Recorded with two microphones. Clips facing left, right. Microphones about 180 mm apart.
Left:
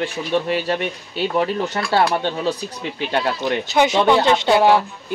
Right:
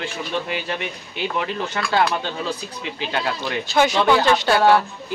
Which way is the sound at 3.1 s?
20° left (ahead or behind).